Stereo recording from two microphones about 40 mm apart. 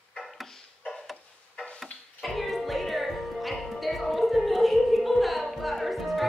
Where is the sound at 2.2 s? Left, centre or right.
Centre.